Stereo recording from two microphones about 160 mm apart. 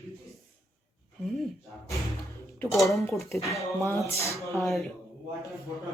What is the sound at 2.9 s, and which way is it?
Speech, 20° left (ahead or behind).